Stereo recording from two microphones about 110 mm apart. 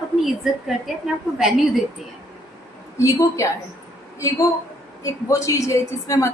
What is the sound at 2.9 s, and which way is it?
Speech, 25° left (ahead or behind).